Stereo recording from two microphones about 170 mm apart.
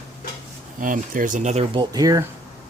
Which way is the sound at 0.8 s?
50° right (ahead or behind).